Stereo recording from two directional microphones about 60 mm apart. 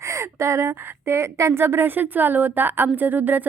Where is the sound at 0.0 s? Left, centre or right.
Right.